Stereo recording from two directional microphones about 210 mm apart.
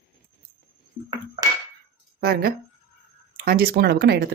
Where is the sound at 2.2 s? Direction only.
45° right (ahead or behind).